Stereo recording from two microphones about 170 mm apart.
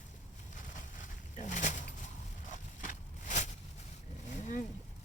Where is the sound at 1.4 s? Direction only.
45° left (ahead or behind).